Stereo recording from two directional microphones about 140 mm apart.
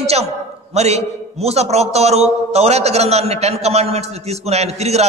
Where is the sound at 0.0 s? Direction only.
50° right (ahead or behind).